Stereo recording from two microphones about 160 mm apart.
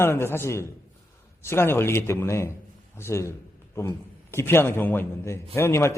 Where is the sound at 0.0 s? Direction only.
15° left (ahead or behind).